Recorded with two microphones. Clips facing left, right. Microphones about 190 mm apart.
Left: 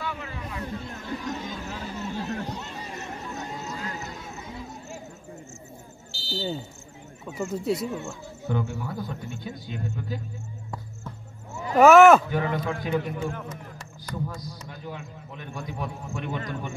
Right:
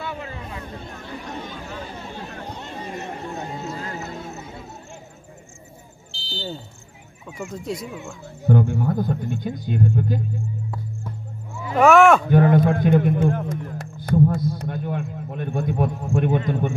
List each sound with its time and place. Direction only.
4.0 s a sound: 60° right (ahead or behind)
6.2 s smoke detector: 5° left (ahead or behind)
7.6 s speech: 5° left (ahead or behind)
8.5 s speech: 50° right (ahead or behind)
11.7 s speech: centre (ahead or behind)
12.3 s a man's voice: 50° right (ahead or behind)
14.5 s a sound: 60° right (ahead or behind)